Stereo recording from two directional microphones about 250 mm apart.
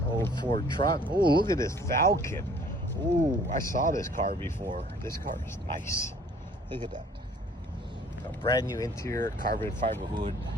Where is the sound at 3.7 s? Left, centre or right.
Right.